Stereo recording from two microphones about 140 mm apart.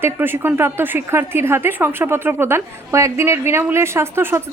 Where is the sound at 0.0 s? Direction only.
15° right (ahead or behind).